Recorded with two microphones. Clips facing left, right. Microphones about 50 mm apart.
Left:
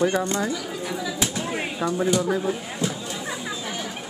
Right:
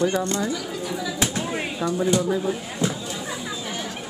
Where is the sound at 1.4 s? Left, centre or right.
Centre.